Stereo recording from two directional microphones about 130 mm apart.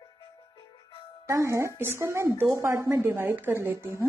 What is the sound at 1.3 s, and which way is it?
A woman's voice, 20° right (ahead or behind).